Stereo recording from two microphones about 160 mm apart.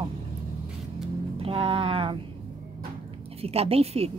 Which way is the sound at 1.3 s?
35° right (ahead or behind).